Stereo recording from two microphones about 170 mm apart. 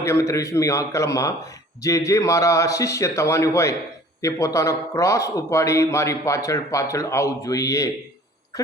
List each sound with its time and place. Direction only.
0.0 s a man's voice: 15° left (ahead or behind)